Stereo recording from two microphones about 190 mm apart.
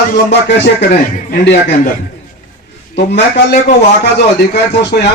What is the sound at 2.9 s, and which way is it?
Speech, 55° left (ahead or behind).